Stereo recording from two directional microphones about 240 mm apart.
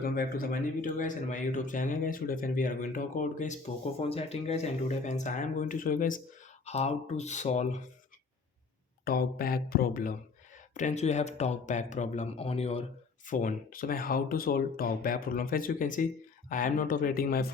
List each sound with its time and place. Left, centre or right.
0.0 s speech: left
9.0 s speech: left